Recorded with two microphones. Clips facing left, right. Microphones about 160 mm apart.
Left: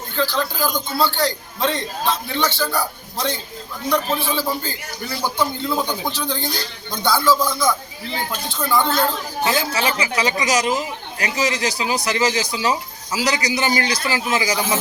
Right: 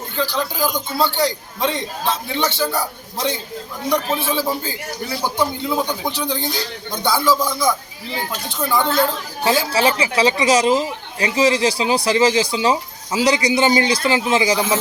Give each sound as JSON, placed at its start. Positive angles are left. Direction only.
{"t": 0.2, "sound": "a man's voice", "side_deg": -15}
{"t": 3.8, "sound": "a man's voice", "side_deg": -20}
{"t": 9.4, "sound": "speech", "side_deg": -30}